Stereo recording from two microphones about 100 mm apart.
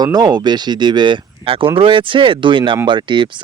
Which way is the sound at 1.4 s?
65° right (ahead or behind).